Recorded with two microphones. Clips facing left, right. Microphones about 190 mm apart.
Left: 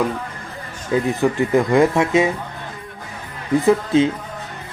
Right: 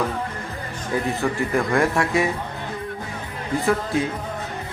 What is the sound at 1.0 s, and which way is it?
Speech, 20° left (ahead or behind).